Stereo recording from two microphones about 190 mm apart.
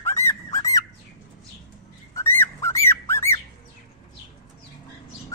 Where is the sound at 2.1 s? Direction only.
15° left (ahead or behind).